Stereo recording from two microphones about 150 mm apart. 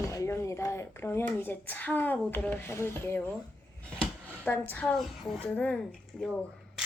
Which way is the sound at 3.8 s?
10° left (ahead or behind).